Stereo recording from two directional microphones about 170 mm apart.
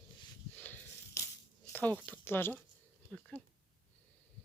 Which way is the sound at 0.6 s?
10° left (ahead or behind).